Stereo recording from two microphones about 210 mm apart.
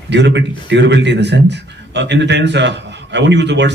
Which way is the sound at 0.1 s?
55° right (ahead or behind).